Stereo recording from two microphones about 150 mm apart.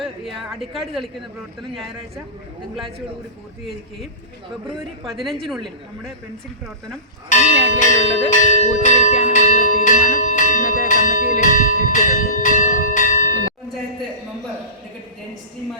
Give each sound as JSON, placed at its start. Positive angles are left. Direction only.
{"t": 0.0, "sound": "a woman's voice", "side_deg": 0}
{"t": 5.0, "sound": "a woman's voice", "side_deg": 0}
{"t": 7.3, "sound": "speech", "side_deg": 55}
{"t": 8.3, "sound": "church bell", "side_deg": 55}